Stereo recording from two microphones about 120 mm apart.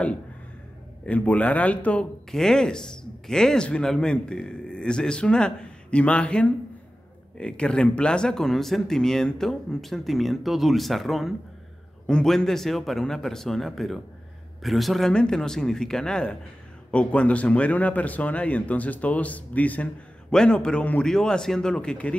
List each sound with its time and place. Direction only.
1.0 s speech: 10° left (ahead or behind)